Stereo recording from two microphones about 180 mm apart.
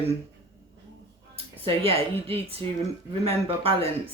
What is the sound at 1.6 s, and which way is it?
Speech, 30° right (ahead or behind).